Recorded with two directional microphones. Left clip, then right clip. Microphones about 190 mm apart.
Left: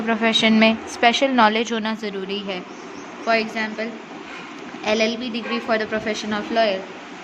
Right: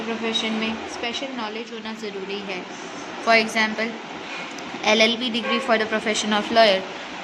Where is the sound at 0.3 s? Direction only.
60° left (ahead or behind); by 2.6 s 40° left (ahead or behind).